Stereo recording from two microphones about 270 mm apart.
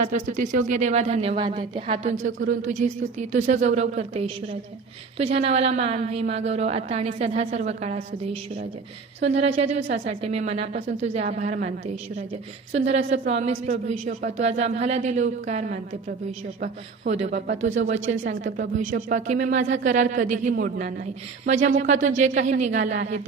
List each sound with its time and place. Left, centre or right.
0.0 s speech: right
0.7 s a woman's voice: right
9.7 s a woman's voice: right
12.7 s a woman's voice: right